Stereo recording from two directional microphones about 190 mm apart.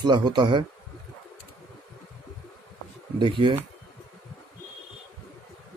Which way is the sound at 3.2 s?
25° right (ahead or behind).